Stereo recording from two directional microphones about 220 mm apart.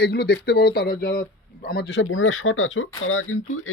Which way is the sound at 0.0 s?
45° left (ahead or behind).